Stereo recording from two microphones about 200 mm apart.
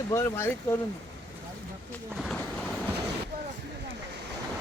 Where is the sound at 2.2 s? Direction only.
Centre (ahead or behind).